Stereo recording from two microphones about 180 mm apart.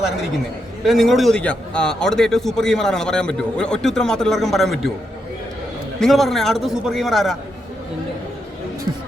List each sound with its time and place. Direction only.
0.9 s a man's voice: centre (ahead or behind)
6.0 s a man's voice: centre (ahead or behind)